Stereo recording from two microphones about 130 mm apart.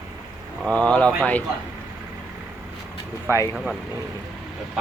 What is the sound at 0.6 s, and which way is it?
Speech, 10° left (ahead or behind).